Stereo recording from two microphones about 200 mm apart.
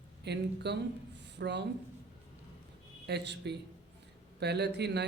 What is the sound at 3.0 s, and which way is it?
A man's voice, 60° right (ahead or behind).